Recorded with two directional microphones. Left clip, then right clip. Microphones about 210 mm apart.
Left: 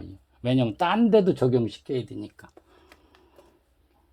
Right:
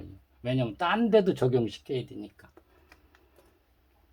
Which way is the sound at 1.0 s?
20° left (ahead or behind).